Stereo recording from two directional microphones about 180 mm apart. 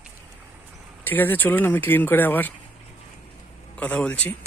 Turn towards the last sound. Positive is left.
turn(degrees=5)  # may be behind; listen again after turning